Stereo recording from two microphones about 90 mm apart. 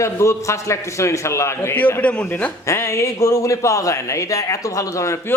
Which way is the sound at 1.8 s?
20° left (ahead or behind).